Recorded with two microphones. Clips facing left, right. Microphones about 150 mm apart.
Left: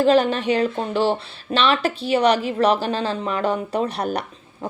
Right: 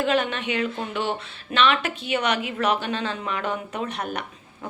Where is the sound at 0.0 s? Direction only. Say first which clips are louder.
Left 7 dB; 35° left (ahead or behind).